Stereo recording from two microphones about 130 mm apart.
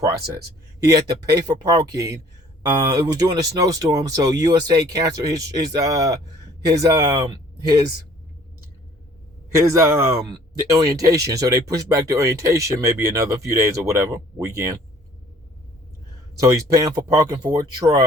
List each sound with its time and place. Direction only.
0.9 s speech: 25° right (ahead or behind)
9.6 s speech: 25° right (ahead or behind)
16.4 s speech: 25° right (ahead or behind)